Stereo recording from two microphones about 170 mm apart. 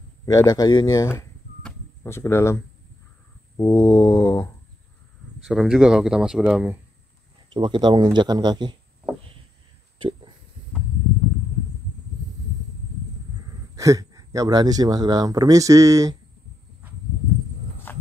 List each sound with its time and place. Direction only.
0.2 s speech: 20° left (ahead or behind)
1.6 s a sound: 15° left (ahead or behind)
3.5 s speech: 20° left (ahead or behind)
5.4 s speech: centre (ahead or behind)
7.4 s speech: 30° right (ahead or behind)
13.7 s speech: 20° right (ahead or behind)
17.9 s walk: 10° left (ahead or behind)